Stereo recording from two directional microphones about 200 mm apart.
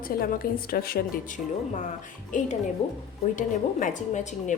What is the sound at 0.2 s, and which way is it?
A woman's voice, 50° left (ahead or behind).